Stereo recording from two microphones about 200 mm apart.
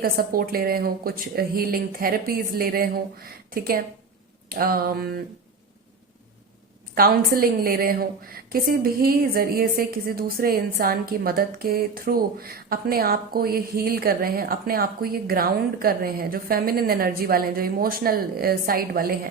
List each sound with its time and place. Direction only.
0.0 s a woman's voice: 45° right (ahead or behind)
6.9 s a woman's voice: 50° right (ahead or behind)